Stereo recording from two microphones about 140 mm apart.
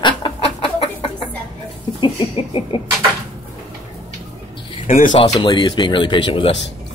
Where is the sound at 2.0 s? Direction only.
35° left (ahead or behind).